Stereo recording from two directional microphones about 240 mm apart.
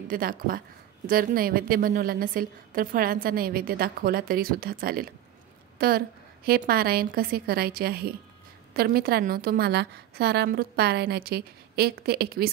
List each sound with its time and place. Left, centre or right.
0.1 s a woman's voice: right